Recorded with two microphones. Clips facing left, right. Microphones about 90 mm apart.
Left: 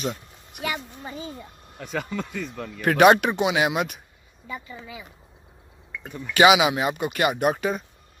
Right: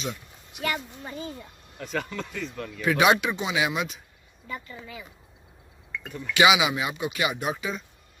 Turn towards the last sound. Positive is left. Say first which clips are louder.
# left 7 dB
turn(degrees=55)  # may be behind; listen again after turning